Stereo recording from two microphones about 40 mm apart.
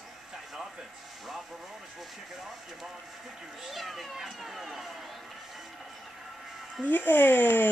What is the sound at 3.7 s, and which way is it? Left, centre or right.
Speech, centre.